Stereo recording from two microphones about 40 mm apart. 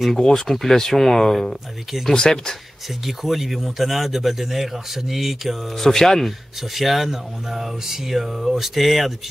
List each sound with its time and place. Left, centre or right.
0.2 s speech: centre
2.1 s speech: centre
3.1 s speech: centre
5.8 s speech: centre
6.7 s speech: centre